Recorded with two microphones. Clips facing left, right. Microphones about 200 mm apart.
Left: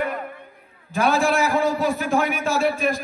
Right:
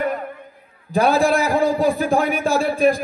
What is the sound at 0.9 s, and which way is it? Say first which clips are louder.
A man's voice: right 3 dB; 35° right (ahead or behind).